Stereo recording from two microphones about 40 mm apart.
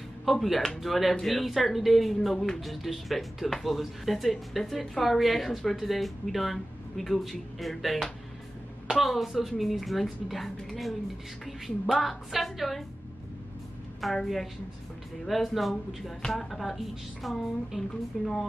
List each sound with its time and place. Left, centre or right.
0.2 s speech: centre
2.3 s speech: centre
2.6 s speech: centre
14.0 s speech: centre